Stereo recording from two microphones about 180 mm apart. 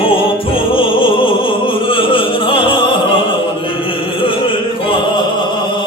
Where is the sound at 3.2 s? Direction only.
30° left (ahead or behind).